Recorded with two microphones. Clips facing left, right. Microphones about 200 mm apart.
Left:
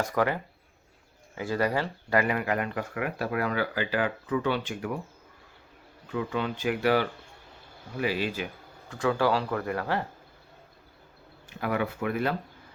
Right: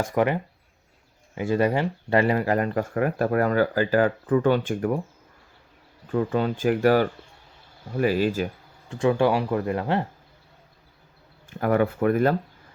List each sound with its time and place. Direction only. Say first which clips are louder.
0.0 s speech: right 4 dB; 20° right (ahead or behind)
1.4 s speech: right 5 dB; 25° right (ahead or behind); by 4.9 s 45° right (ahead or behind)
6.1 s speech: right 6 dB; 45° right (ahead or behind)
8.9 s speech: right 5 dB; 25° right (ahead or behind)
11.4 s speech: right 7 dB; 45° right (ahead or behind)